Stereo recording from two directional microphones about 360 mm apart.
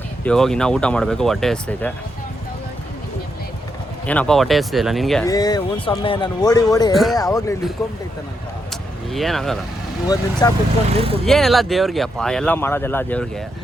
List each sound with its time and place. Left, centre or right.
0.3 s speech: centre
4.0 s speech: centre
6.9 s speech: centre
8.7 s vehicle: centre
10.4 s speech: centre
10.8 s speech: centre
11.3 s speech: centre